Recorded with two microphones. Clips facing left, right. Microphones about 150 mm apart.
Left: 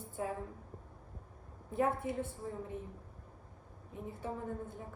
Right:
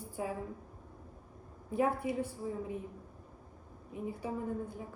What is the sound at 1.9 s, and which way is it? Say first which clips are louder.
Speech: right 2 dB; 25° left (ahead or behind).